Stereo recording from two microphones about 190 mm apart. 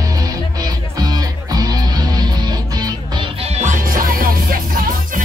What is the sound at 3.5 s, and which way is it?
Music, 45° right (ahead or behind).